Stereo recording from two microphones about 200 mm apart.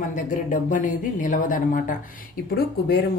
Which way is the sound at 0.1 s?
40° left (ahead or behind).